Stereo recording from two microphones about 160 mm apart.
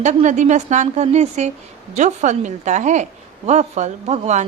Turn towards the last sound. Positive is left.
turn(degrees=-45)  # may be behind; listen again after turning